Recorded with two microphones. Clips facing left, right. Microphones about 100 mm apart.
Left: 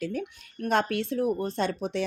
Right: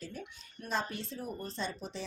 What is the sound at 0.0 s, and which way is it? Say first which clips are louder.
Speech: left 12 dB; 65° left (ahead or behind).